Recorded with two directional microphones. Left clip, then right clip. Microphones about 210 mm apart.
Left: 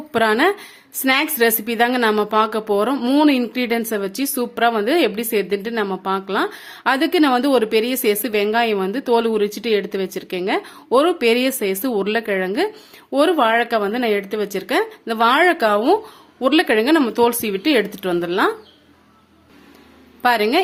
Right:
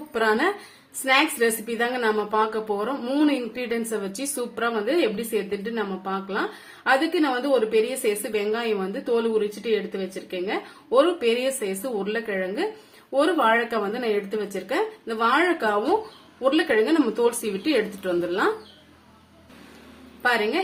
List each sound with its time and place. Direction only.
0.1 s a woman's voice: 45° left (ahead or behind)
20.2 s a woman's voice: 50° left (ahead or behind)